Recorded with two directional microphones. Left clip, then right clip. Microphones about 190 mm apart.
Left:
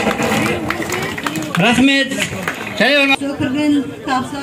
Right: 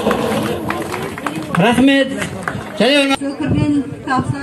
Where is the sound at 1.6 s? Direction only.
10° left (ahead or behind).